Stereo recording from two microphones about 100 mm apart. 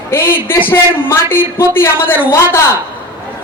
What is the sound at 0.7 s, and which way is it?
A man's voice, 25° left (ahead or behind).